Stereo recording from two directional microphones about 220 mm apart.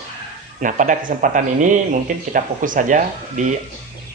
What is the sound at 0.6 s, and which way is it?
Speech, 35° right (ahead or behind).